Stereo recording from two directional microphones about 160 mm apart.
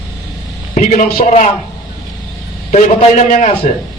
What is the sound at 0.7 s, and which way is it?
Speech, 50° left (ahead or behind).